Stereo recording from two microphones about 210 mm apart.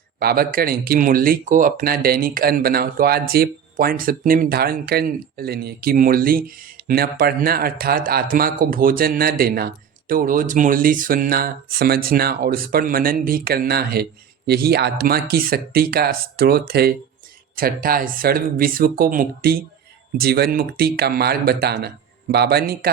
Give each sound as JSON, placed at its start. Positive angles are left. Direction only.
{"t": 0.2, "sound": "speech", "side_deg": -45}